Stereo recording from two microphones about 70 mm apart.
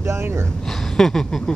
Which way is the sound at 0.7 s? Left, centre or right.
Centre.